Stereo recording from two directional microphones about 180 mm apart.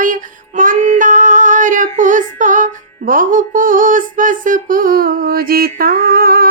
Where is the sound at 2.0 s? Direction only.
45° right (ahead or behind).